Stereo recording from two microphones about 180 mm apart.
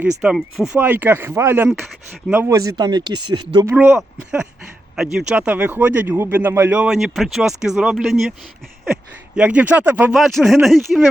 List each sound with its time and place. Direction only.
0.2 s speech: centre (ahead or behind); by 3.4 s 25° right (ahead or behind)
3.7 s speech: 10° right (ahead or behind)
9.3 s speech: 5° right (ahead or behind)